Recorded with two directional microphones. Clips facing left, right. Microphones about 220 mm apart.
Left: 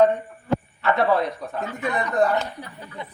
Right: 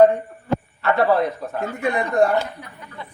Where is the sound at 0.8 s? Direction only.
Centre (ahead or behind).